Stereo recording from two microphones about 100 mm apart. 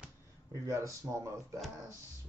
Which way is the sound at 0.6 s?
30° right (ahead or behind).